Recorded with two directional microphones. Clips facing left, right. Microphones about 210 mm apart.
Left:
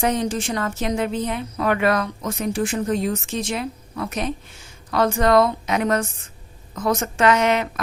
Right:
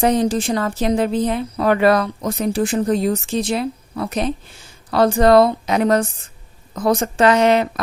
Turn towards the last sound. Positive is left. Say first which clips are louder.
# right 4 dB
turn(degrees=-35)  # may be behind; listen again after turning